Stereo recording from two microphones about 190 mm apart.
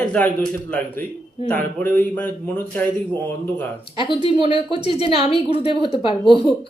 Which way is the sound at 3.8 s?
25° left (ahead or behind).